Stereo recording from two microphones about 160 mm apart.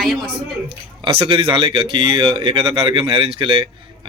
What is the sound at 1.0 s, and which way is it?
Speech, 35° right (ahead or behind).